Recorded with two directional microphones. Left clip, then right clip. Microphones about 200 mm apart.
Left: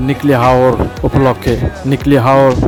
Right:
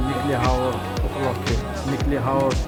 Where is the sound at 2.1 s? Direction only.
45° left (ahead or behind).